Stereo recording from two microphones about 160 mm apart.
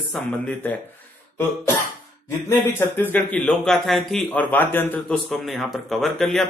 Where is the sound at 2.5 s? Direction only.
15° left (ahead or behind).